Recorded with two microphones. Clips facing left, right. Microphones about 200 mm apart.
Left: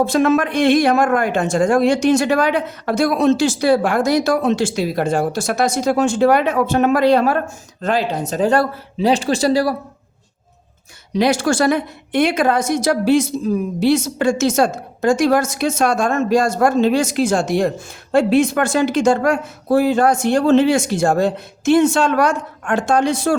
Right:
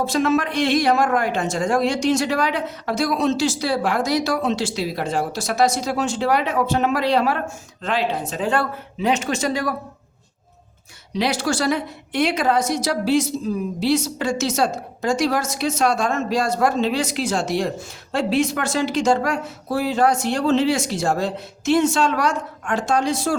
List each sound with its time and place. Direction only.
0.0 s a woman's voice: 55° left (ahead or behind); by 9.7 s 35° left (ahead or behind)
11.2 s a woman's voice: 50° left (ahead or behind)